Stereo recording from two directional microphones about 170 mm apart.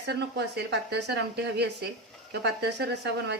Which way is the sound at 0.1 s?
80° right.